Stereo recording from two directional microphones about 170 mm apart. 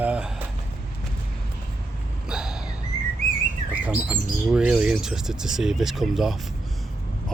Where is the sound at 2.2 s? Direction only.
5° right (ahead or behind).